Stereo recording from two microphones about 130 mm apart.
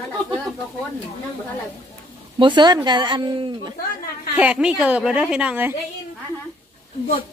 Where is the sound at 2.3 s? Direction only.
35° right (ahead or behind).